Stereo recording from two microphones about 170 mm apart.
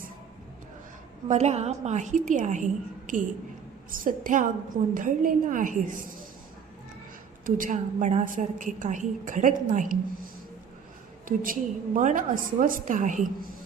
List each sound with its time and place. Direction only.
1.3 s a woman's voice: 40° right (ahead or behind)
7.4 s a woman's voice: 50° right (ahead or behind)
11.3 s a woman's voice: 55° right (ahead or behind)